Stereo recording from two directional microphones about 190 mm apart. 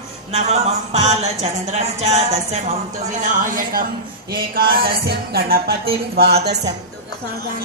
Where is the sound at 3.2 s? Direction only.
45° right (ahead or behind).